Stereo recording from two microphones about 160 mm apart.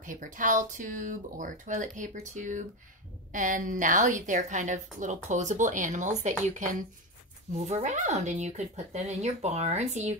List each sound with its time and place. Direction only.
0.0 s a woman's voice: 55° right (ahead or behind)